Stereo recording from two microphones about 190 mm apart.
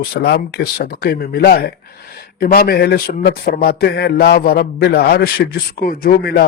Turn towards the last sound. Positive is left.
turn(degrees=55)  # may be behind; listen again after turning